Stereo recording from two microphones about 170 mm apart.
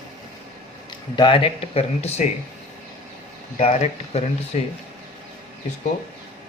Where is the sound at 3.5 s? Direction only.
40° left (ahead or behind).